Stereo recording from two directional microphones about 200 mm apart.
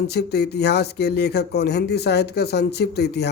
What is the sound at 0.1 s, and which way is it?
Speech, 55° left (ahead or behind).